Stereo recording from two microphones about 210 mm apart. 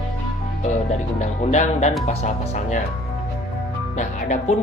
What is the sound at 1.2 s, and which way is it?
Speech, 35° left (ahead or behind).